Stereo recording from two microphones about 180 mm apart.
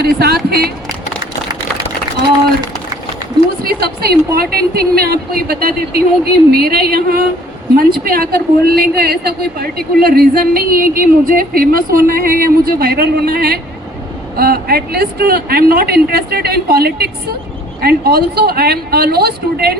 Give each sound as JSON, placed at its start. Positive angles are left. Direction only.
{"t": 0.0, "sound": "a woman's voice", "side_deg": -60}
{"t": 3.6, "sound": "a woman's voice", "side_deg": -60}